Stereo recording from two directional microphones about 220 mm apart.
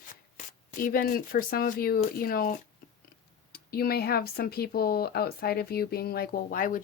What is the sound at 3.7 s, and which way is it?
Speech, 45° left (ahead or behind).